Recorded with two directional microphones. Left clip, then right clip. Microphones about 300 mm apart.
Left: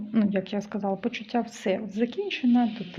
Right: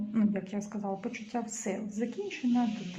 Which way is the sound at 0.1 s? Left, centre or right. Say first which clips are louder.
Left 7 dB; left.